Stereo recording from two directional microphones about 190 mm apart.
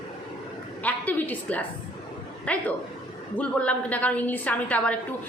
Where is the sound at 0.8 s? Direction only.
10° left (ahead or behind).